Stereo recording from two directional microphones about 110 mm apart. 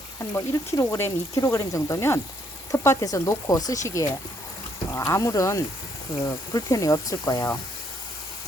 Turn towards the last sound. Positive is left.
turn(degrees=35)  # may be behind; listen again after turning